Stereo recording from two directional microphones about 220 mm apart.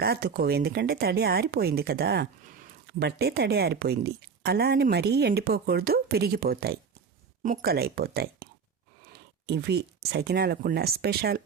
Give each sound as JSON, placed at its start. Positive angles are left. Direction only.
{"t": 0.0, "sound": "speech", "side_deg": -45}
{"t": 9.5, "sound": "speech", "side_deg": -50}